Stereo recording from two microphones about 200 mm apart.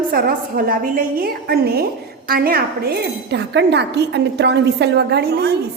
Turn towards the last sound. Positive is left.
turn(degrees=-55)  # may be behind; listen again after turning